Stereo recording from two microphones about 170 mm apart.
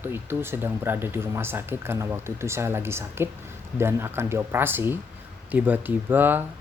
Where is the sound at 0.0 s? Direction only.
15° right (ahead or behind).